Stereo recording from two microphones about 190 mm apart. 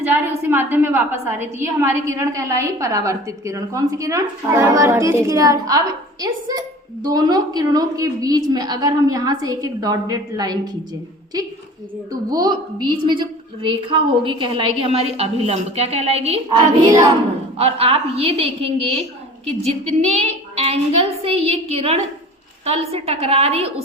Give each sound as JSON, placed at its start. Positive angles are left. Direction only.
{"t": 0.0, "sound": "a woman's voice", "side_deg": -10}
{"t": 12.3, "sound": "a woman's voice", "side_deg": -20}
{"t": 17.6, "sound": "a woman's voice", "side_deg": -30}